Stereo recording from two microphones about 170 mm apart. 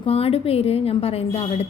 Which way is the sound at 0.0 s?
35° left (ahead or behind).